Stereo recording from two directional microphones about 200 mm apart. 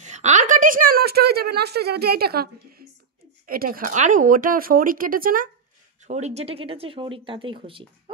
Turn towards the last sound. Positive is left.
turn(degrees=-25)  # may be behind; listen again after turning